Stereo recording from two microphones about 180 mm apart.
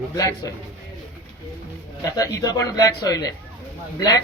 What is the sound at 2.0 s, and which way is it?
Speech, 20° left (ahead or behind).